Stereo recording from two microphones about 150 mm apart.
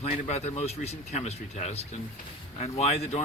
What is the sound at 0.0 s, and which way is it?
Speech, 45° left (ahead or behind).